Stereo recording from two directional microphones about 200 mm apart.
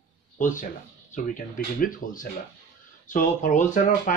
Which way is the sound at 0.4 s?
40° left (ahead or behind).